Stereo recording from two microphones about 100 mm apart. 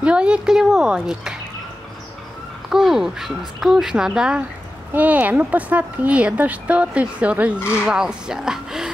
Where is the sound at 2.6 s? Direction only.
5° right (ahead or behind).